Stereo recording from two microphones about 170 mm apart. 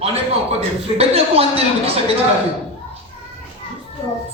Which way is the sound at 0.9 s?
35° right (ahead or behind).